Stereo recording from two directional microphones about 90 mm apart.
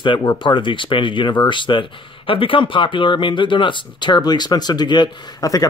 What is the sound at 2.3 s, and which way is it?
Speech, 80° left.